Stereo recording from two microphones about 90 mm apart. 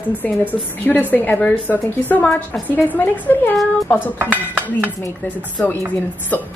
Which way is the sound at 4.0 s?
20° right (ahead or behind).